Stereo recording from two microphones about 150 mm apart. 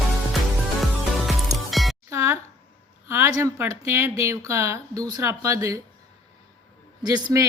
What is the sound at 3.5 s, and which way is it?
Speech, 15° right (ahead or behind).